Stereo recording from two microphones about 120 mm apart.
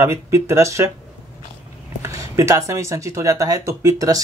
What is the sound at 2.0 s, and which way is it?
Speech, 25° right (ahead or behind).